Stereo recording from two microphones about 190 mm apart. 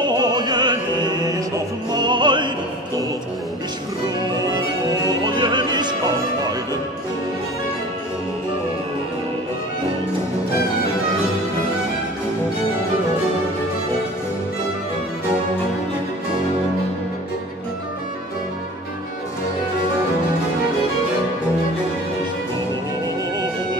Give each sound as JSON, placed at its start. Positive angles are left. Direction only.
{"t": 0.0, "sound": "music", "side_deg": -20}
{"t": 1.9, "sound": "opera", "side_deg": -25}
{"t": 5.2, "sound": "opera", "side_deg": -25}